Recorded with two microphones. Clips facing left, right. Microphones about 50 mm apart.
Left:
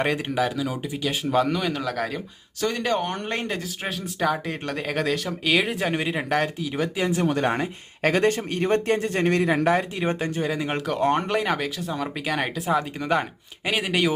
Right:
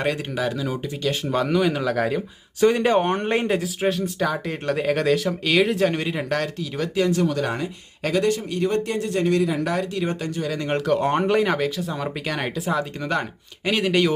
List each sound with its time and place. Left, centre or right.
0.3 s speech: centre
2.6 s speech: centre
3.2 s speech: centre; by 10.5 s left
10.5 s speech: centre